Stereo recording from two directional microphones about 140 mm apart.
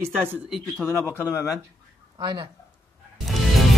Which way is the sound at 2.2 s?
35° right (ahead or behind).